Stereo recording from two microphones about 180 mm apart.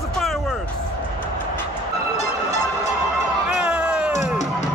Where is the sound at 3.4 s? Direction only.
5° right (ahead or behind).